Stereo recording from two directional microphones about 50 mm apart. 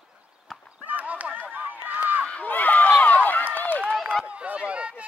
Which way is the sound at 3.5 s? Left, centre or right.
Left.